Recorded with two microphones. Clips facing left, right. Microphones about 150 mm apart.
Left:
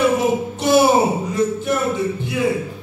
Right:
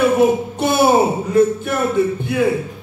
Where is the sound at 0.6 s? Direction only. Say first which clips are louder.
Left 4 dB; 55° right (ahead or behind).